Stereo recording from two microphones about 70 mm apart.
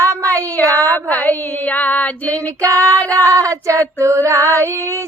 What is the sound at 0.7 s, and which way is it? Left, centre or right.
Female singing, right.